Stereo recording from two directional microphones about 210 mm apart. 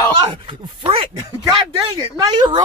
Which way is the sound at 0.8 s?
25° right (ahead or behind).